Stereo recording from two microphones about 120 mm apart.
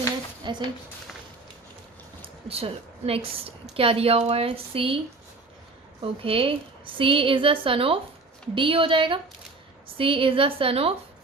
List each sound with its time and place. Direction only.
0.4 s a sound: 40° right (ahead or behind)
2.2 s a woman's voice: 55° right (ahead or behind)
6.0 s a woman's voice: 50° right (ahead or behind)